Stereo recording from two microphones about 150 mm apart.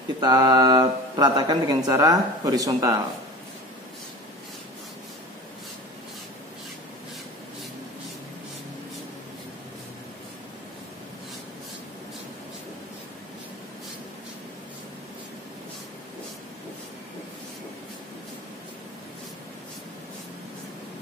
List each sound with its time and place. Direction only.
0.2 s speech: 25° right (ahead or behind)